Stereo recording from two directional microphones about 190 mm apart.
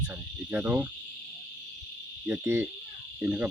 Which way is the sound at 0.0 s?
10° right (ahead or behind).